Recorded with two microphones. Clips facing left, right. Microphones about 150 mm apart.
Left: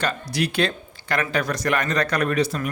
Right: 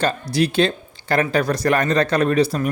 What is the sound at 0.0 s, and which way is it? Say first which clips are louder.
Speech: right 5 dB; 30° right (ahead or behind).